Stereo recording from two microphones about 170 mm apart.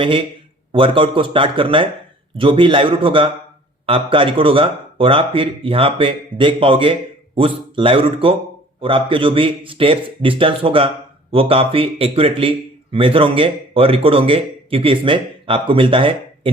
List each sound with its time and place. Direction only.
0.0 s a man's voice: 30° right (ahead or behind)